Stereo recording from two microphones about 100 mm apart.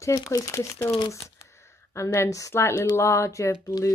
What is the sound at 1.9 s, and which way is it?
Speech, 30° left (ahead or behind).